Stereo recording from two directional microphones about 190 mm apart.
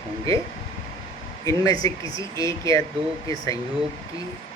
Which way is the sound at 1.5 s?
20° left (ahead or behind).